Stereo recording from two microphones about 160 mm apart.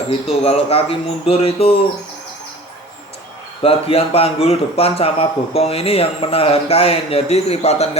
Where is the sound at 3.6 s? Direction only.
35° left (ahead or behind).